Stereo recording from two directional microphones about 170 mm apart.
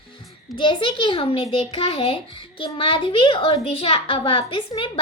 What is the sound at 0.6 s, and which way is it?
A child's voice, 30° left (ahead or behind).